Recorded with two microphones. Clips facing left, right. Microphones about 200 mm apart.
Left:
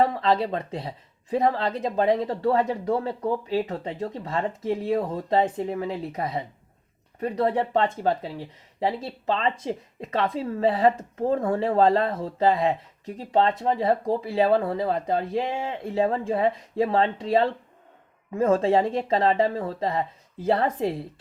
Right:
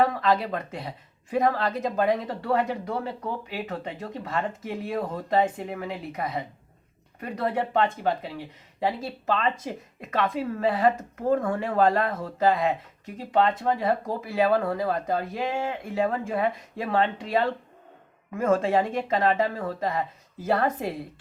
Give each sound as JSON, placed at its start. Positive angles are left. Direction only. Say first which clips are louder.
{"t": 0.0, "sound": "speech", "louder": "left 1 dB", "side_deg": 30}